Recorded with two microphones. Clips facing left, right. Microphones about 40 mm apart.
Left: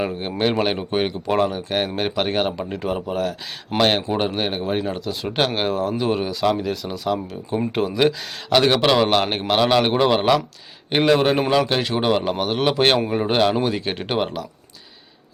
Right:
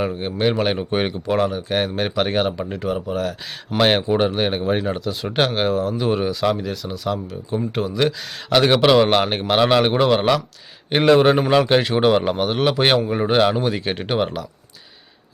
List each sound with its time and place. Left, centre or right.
0.0 s a man's voice: centre
3.8 s a man's voice: centre